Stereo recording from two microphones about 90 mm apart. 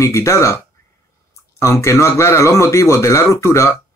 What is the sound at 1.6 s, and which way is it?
Speech, 30° left (ahead or behind).